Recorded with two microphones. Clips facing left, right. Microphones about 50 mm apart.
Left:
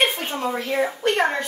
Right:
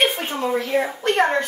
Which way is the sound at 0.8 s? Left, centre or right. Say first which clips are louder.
Even; right.